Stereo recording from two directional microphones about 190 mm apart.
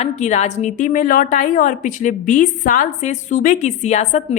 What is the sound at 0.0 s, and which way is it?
A woman's voice, 35° left (ahead or behind).